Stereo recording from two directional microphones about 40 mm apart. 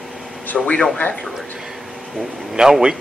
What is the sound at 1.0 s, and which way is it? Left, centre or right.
Speech, left.